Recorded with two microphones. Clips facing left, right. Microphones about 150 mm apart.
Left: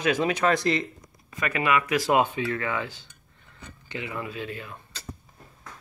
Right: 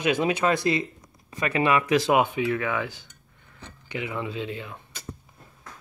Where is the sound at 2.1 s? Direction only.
15° right (ahead or behind).